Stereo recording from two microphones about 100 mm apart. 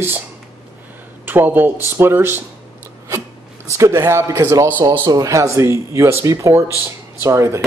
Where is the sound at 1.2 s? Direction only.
20° right (ahead or behind).